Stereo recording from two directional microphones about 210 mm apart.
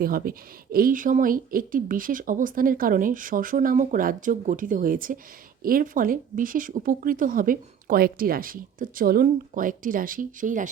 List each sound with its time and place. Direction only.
0.0 s speech: 45° right (ahead or behind)